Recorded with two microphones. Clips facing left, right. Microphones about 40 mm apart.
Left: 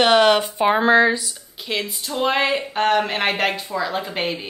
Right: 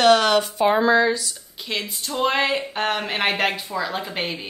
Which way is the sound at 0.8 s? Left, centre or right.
Left.